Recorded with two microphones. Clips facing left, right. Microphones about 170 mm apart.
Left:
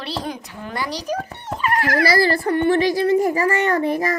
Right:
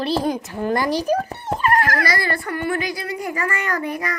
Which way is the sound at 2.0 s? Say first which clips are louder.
Left 6 dB; 30° left (ahead or behind).